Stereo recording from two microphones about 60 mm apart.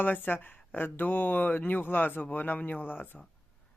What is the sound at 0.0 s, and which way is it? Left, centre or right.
Speech, left.